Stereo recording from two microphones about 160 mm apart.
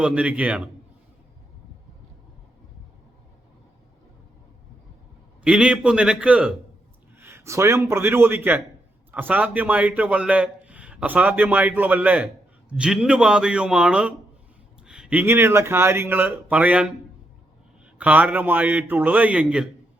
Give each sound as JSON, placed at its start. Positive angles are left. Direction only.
{"t": 0.0, "sound": "a man's voice", "side_deg": -5}
{"t": 5.4, "sound": "a man's voice", "side_deg": -5}
{"t": 17.9, "sound": "a man's voice", "side_deg": -10}